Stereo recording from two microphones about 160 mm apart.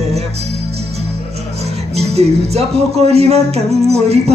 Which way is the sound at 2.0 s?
40° right (ahead or behind).